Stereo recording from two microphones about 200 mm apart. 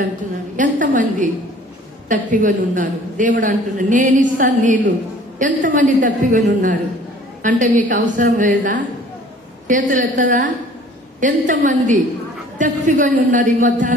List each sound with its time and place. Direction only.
0.6 s a man's voice: 40° right (ahead or behind)